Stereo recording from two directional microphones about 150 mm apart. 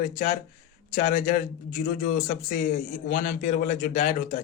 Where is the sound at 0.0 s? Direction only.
60° left (ahead or behind).